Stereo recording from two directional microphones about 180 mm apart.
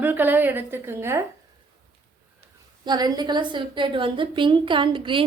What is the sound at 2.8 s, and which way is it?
A woman's voice, 20° right (ahead or behind).